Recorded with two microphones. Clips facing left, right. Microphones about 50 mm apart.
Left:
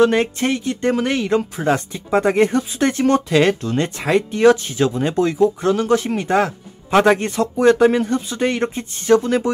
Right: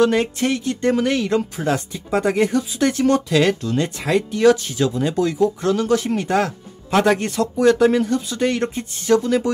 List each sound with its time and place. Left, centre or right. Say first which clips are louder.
0.0 s speech: left 2 dB; left